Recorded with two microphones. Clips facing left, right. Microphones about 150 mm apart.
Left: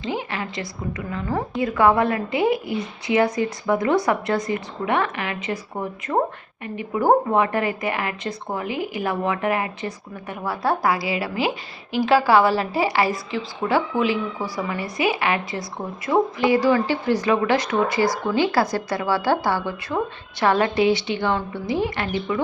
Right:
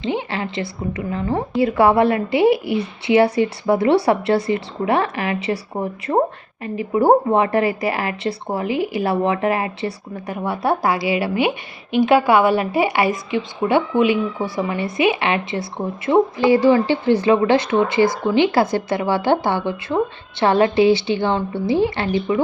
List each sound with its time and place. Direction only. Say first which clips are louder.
0.0 s a woman's voice: right 4 dB; 25° right (ahead or behind)